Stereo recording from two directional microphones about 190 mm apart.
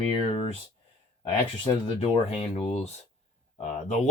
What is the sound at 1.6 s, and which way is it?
Speech, 30° left (ahead or behind).